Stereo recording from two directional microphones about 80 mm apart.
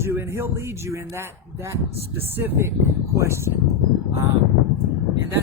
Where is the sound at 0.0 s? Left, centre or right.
Right.